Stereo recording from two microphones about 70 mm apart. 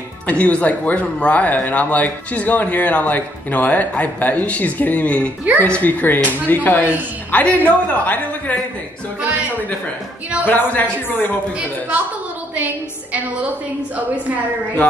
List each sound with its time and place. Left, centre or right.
0.3 s speech: centre
10.4 s speech: left
12.5 s a woman's voice: right